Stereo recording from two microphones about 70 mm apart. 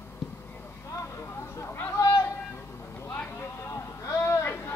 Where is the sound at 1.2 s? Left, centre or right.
Left.